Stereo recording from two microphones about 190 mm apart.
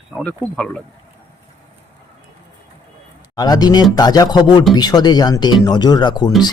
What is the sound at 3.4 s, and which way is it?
Speech, 20° left (ahead or behind).